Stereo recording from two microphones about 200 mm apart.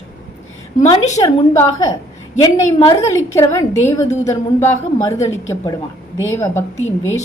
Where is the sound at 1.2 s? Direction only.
20° left (ahead or behind).